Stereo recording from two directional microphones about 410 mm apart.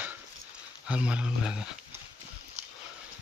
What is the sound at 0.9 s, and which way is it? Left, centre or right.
Speech, centre.